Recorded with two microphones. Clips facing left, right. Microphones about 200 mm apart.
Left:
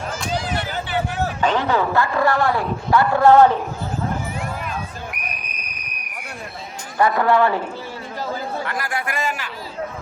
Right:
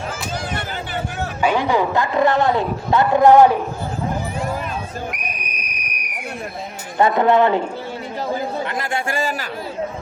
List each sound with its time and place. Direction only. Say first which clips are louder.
1.4 s a man's voice: right 3 dB; 10° right (ahead or behind)
5.1 s a sound: right 3 dB; 20° right (ahead or behind)
7.0 s a man's voice: right 2 dB; 20° right (ahead or behind)
8.3 s chatter: right 3 dB; 20° right (ahead or behind)